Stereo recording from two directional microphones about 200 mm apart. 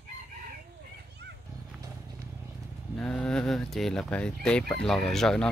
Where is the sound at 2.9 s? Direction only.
5° left (ahead or behind).